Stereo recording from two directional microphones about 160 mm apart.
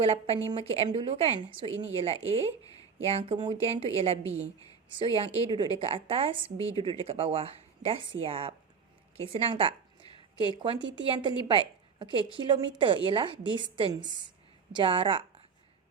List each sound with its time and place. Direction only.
0.0 s a woman's voice: 35° right (ahead or behind)